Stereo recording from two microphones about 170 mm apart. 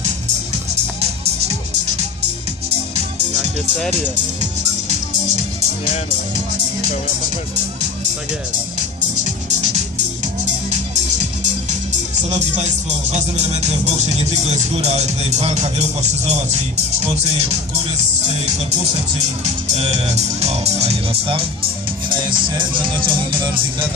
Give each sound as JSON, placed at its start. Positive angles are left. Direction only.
{"t": 12.2, "sound": "speech", "side_deg": -45}
{"t": 19.7, "sound": "speech", "side_deg": -40}